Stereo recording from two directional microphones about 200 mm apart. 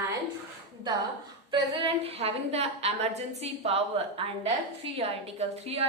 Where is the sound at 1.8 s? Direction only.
30° right (ahead or behind).